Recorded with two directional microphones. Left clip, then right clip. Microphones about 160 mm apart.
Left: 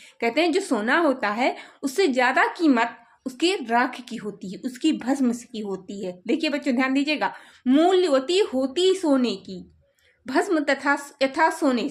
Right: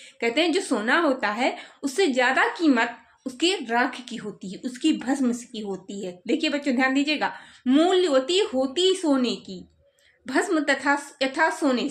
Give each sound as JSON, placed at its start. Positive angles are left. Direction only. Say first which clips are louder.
{"t": 0.2, "sound": "speech", "louder": "left 1 dB", "side_deg": 30}